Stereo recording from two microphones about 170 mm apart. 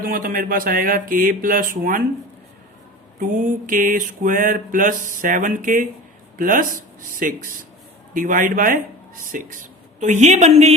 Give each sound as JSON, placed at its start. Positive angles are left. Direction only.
{"t": 0.0, "sound": "speech", "side_deg": -55}
{"t": 3.2, "sound": "mantra", "side_deg": -55}
{"t": 6.3, "sound": "speech", "side_deg": -50}
{"t": 8.1, "sound": "mantra", "side_deg": -50}